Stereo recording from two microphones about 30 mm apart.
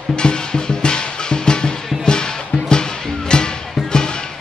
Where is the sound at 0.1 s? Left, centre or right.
Left.